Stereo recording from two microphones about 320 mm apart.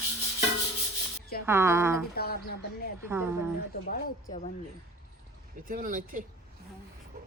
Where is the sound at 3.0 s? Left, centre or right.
Centre.